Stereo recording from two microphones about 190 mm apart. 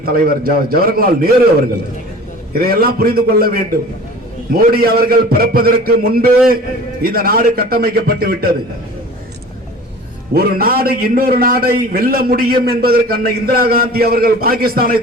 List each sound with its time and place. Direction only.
0.0 s a man's voice: 50° right (ahead or behind)
2.5 s a man's voice: 50° right (ahead or behind)
10.3 s a man's voice: 55° right (ahead or behind)